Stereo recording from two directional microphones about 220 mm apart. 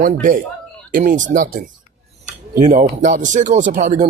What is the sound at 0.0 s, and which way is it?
Speech, 35° right (ahead or behind).